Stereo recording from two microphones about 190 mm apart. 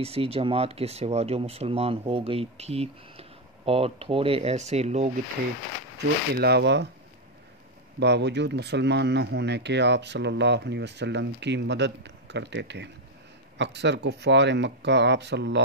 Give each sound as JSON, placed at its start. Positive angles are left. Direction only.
{"t": 0.0, "sound": "speech", "side_deg": -30}
{"t": 6.3, "sound": "speech", "side_deg": -60}
{"t": 8.0, "sound": "speech", "side_deg": -65}